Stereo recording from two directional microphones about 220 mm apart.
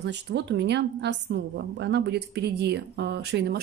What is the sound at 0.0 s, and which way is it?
A woman's voice, 50° right (ahead or behind).